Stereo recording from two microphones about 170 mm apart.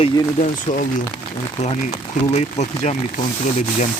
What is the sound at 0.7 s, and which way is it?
Speech, 45° left (ahead or behind).